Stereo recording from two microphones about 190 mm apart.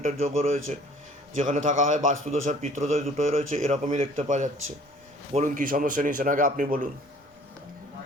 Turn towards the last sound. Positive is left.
turn(degrees=-45)  # may be behind; listen again after turning